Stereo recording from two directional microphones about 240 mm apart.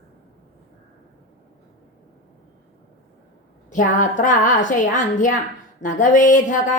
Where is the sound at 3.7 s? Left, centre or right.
Left.